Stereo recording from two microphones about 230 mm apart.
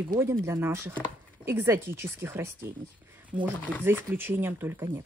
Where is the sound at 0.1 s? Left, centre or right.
Centre.